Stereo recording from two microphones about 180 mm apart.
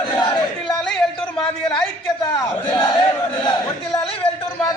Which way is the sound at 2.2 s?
25° left (ahead or behind).